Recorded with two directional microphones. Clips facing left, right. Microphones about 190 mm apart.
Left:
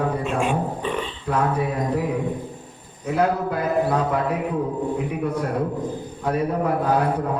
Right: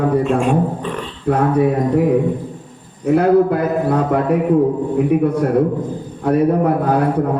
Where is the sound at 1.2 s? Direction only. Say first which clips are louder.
Right 9 dB; 55° right (ahead or behind).